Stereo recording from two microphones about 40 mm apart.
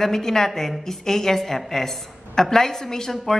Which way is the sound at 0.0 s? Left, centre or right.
Centre.